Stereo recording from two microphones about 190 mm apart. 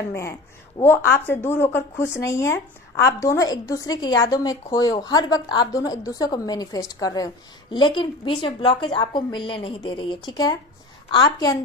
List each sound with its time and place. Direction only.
0.1 s a woman's voice: 15° left (ahead or behind)